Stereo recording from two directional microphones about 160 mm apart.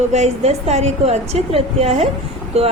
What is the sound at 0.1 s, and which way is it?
A woman's voice, 45° right (ahead or behind).